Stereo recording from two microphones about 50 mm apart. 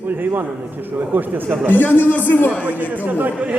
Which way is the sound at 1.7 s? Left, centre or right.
Left.